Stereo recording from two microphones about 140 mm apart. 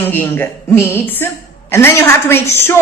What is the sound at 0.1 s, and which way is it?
A woman's voice, 15° left (ahead or behind).